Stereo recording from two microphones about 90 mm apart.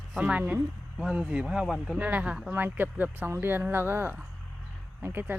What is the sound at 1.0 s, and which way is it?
Speech, 5° right (ahead or behind).